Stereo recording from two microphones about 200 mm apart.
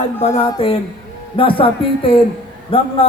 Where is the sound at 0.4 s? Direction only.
30° left (ahead or behind).